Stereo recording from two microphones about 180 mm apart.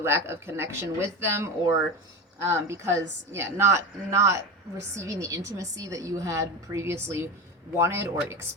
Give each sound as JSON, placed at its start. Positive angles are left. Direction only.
{"t": 0.0, "sound": "a woman's voice", "side_deg": -15}